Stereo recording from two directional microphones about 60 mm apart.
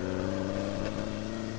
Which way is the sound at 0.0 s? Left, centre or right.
Left.